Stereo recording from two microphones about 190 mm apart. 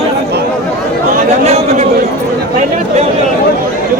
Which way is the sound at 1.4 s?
35° right (ahead or behind).